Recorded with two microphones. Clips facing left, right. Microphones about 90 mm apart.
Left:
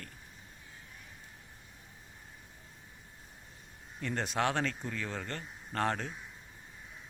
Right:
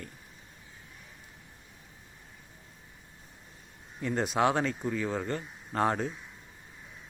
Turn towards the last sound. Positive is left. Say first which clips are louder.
# right 5 dB
turn(degrees=-10)  # may be behind; listen again after turning